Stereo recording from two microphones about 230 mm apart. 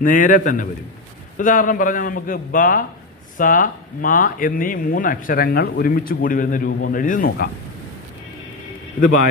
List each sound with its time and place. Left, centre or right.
0.0 s speech: left
9.0 s speech: left